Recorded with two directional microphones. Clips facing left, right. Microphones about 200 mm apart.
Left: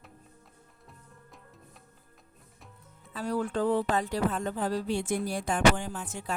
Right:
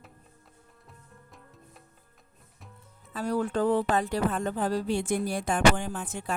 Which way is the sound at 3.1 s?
45° right (ahead or behind).